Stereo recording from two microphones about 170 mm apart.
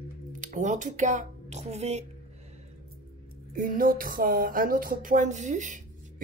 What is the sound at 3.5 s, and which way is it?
Speech, 55° right (ahead or behind).